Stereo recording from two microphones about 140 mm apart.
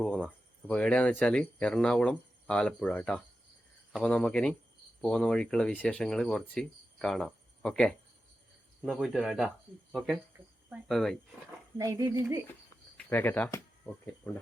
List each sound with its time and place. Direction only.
0.0 s a sound: 5° left (ahead or behind)
0.7 s speech: 10° left (ahead or behind)
10.7 s speech: centre (ahead or behind)
11.8 s speech: 25° right (ahead or behind)
13.0 s speech: 15° left (ahead or behind)